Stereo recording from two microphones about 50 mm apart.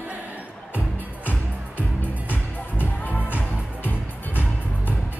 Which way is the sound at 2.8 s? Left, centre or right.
Left.